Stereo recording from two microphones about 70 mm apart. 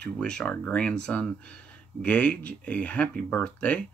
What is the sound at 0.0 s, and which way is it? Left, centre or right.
Speech, centre.